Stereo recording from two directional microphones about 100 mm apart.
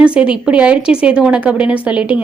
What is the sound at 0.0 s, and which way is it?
A woman's voice, 10° right (ahead or behind).